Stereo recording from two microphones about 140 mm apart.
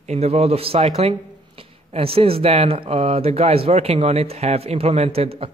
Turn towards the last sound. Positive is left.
turn(degrees=-45)  # may be behind; listen again after turning